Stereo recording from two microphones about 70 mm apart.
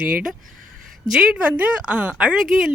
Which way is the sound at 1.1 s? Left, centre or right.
Centre.